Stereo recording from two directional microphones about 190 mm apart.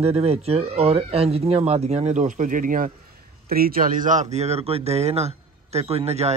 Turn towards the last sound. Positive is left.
turn(degrees=-35)  # may be behind; listen again after turning